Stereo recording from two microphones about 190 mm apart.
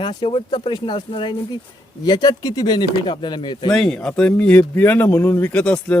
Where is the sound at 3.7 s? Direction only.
5° left (ahead or behind).